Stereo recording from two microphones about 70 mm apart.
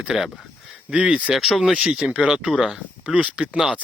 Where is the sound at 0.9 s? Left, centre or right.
Centre.